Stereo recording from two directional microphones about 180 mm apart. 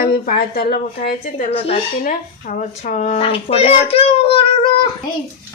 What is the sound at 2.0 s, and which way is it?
Speech, 45° left (ahead or behind).